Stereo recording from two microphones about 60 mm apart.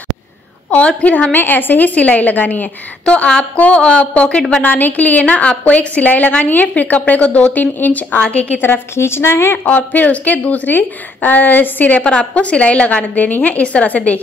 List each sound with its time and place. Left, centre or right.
0.7 s a woman's voice: left
4.6 s a woman's voice: left
8.6 s a woman's voice: left
9.7 s a woman's voice: left